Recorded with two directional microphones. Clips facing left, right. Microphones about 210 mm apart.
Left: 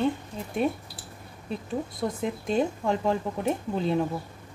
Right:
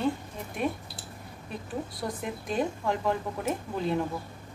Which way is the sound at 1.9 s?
25° left (ahead or behind).